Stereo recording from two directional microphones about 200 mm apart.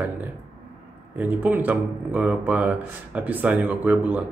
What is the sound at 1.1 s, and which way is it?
Speech, 10° right (ahead or behind).